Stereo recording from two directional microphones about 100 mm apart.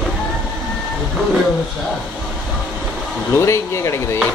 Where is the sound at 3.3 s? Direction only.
30° left (ahead or behind).